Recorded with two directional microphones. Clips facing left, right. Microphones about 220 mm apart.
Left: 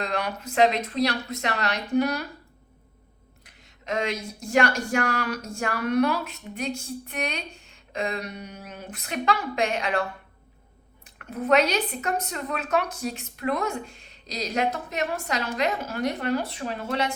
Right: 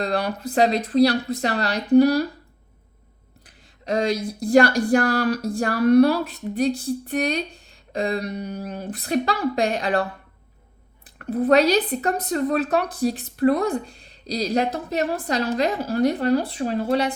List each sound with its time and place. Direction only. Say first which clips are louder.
0.0 s speech: right 5 dB; 35° right (ahead or behind)
3.4 s speech: right 5 dB; 35° right (ahead or behind)